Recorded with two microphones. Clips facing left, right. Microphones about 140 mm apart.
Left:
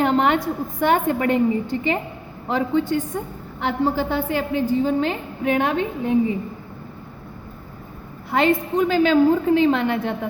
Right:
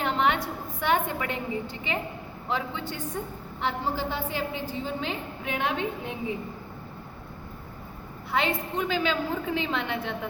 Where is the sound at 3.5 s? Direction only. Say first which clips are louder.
Left 8 dB; 60° left (ahead or behind).